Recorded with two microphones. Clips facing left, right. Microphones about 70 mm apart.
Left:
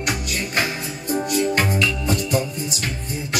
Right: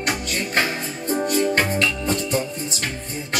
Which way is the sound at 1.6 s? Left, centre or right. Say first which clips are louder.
Even; centre.